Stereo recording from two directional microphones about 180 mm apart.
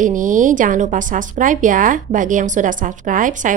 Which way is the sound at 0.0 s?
45° right (ahead or behind).